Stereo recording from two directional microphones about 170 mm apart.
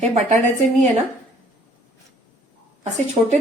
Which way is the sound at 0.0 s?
40° right (ahead or behind).